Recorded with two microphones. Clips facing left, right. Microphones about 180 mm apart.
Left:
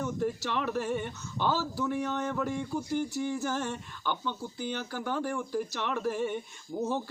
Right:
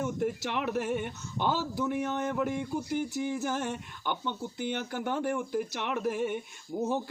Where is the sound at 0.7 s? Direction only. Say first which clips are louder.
Right 1 dB; 15° right (ahead or behind).